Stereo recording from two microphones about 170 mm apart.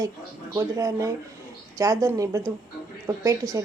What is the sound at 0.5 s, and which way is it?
Speech, 20° right (ahead or behind).